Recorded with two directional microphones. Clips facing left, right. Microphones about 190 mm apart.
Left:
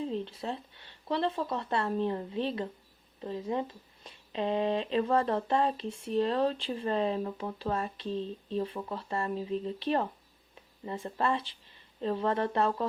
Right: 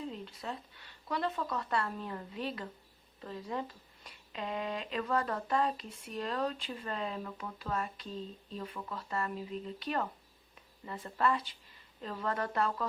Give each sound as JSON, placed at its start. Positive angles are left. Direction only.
{"t": 0.0, "sound": "speech", "side_deg": 25}